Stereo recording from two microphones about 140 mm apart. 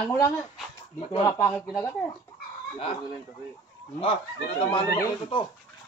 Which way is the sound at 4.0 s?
40° left (ahead or behind).